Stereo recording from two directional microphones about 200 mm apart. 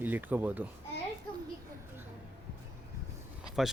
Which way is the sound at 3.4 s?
Centre (ahead or behind).